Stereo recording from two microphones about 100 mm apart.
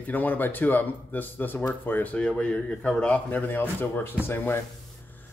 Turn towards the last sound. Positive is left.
turn(degrees=25)  # may be behind; listen again after turning